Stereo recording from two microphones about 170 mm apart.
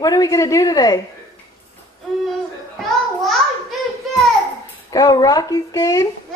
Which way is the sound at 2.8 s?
Centre (ahead or behind).